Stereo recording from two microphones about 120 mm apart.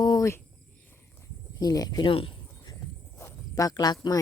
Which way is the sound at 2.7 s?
25° left (ahead or behind).